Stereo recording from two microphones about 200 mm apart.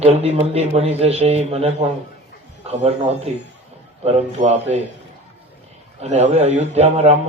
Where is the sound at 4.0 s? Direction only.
35° right (ahead or behind).